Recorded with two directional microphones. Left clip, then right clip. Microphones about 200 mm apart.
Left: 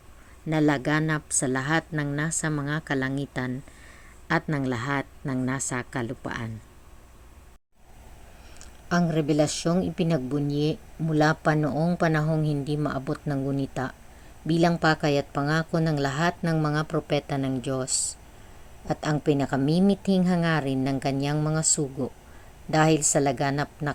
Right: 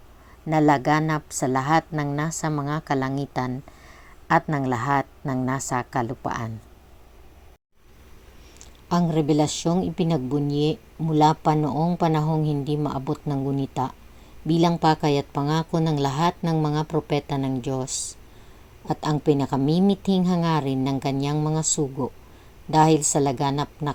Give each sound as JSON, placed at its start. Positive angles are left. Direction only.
{"t": 0.4, "sound": "a woman's voice", "side_deg": 20}
{"t": 8.9, "sound": "a woman's voice", "side_deg": -10}
{"t": 22.7, "sound": "a woman's voice", "side_deg": -5}